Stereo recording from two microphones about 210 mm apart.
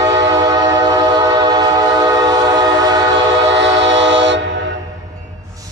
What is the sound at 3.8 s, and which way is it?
Train, 60° right (ahead or behind).